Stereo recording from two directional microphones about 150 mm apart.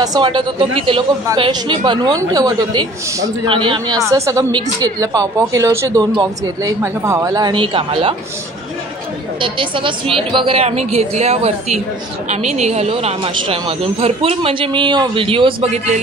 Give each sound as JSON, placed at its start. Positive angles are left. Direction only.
{"t": 0.0, "sound": "a woman's voice", "side_deg": -30}
{"t": 9.4, "sound": "speech", "side_deg": -35}